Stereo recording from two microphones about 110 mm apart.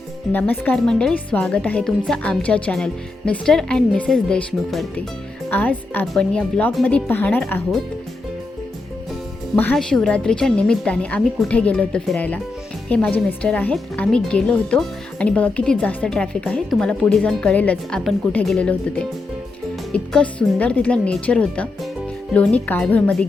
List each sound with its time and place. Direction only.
0.3 s a woman's voice: 15° left (ahead or behind)
5.5 s a woman's voice: 15° left (ahead or behind)
9.7 s a woman's voice: 5° left (ahead or behind)